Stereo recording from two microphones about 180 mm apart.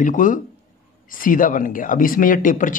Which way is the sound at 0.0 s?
45° left (ahead or behind).